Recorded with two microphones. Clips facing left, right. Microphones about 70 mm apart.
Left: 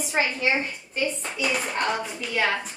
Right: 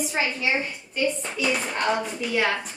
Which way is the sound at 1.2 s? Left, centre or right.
Centre.